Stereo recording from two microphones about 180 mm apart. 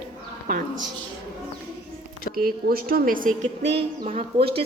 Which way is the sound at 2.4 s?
55° right (ahead or behind).